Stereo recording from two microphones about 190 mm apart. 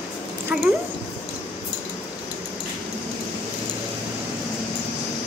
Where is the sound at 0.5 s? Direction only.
5° right (ahead or behind).